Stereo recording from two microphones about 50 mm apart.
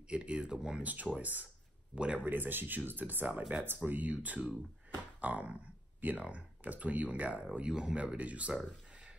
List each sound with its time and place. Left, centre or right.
0.1 s speech: right